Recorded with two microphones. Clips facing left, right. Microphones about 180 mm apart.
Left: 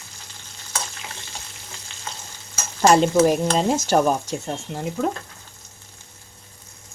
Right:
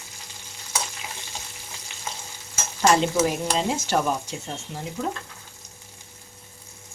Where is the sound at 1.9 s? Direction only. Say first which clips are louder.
Right 1 dB; 15° right (ahead or behind).